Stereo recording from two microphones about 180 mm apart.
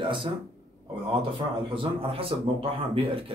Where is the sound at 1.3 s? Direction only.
30° right (ahead or behind).